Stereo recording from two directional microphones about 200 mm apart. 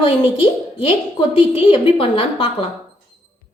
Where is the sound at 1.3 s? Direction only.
25° left (ahead or behind).